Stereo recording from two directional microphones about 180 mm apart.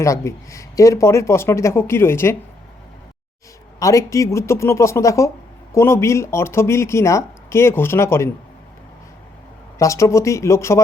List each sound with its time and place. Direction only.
0.0 s speech: 15° left (ahead or behind)
3.8 s speech: 20° left (ahead or behind)
9.7 s speech: 15° left (ahead or behind)